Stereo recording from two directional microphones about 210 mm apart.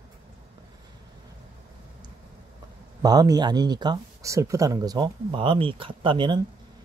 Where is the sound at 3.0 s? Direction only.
20° right (ahead or behind).